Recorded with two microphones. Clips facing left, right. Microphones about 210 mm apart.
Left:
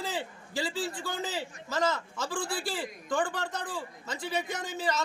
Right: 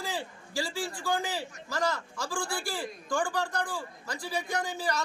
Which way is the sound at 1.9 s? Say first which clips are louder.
Left 1 dB; 5° left (ahead or behind).